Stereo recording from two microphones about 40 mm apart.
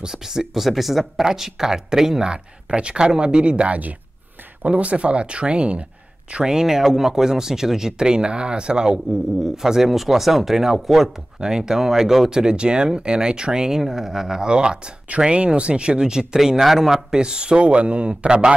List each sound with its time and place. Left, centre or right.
0.0 s speech: centre; by 5.9 s right
6.4 s speech: centre
11.3 s speech: centre
14.5 s speech: right
17.2 s speech: right